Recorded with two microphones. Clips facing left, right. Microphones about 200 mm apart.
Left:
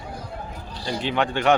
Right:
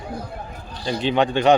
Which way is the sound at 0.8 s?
20° right (ahead or behind).